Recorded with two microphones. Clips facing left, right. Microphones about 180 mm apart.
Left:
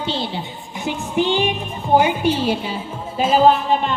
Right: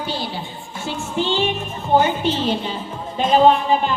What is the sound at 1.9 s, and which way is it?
A woman's voice, 10° left (ahead or behind).